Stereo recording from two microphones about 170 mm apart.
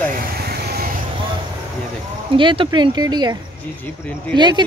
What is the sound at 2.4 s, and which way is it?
Speech, 30° right (ahead or behind).